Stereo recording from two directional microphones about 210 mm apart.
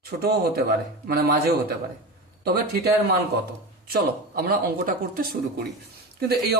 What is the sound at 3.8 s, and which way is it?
Speech, 45° right (ahead or behind).